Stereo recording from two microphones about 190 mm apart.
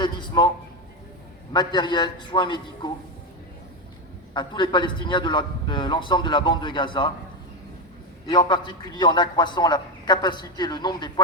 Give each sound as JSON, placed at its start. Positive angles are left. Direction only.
{"t": 0.0, "sound": "a man's voice", "side_deg": 25}
{"t": 1.5, "sound": "a man's voice", "side_deg": 25}
{"t": 4.4, "sound": "a man's voice", "side_deg": 25}
{"t": 8.3, "sound": "a man's voice", "side_deg": 25}